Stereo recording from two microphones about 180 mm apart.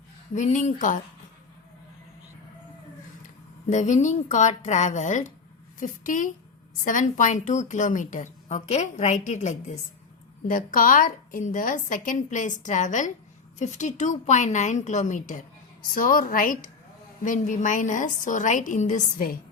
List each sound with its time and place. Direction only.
0.3 s a woman's voice: 40° left (ahead or behind)
3.7 s a woman's voice: 40° left (ahead or behind)